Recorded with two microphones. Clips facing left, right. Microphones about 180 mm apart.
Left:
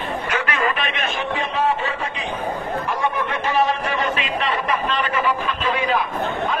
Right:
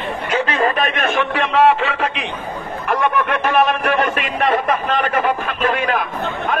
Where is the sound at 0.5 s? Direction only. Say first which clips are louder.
Right 5 dB; 45° right (ahead or behind); by 2.3 s 75° right (ahead or behind).